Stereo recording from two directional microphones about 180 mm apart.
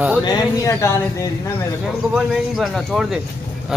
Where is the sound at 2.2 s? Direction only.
Centre (ahead or behind).